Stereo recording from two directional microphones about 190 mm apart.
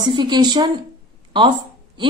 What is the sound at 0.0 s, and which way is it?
Speech, 25° right (ahead or behind).